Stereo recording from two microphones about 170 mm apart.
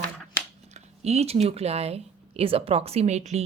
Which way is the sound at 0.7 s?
40° right (ahead or behind).